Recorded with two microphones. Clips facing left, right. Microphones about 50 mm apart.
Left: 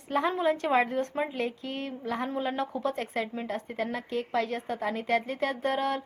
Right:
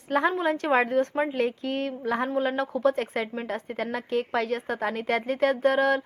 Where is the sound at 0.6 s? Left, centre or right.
Centre.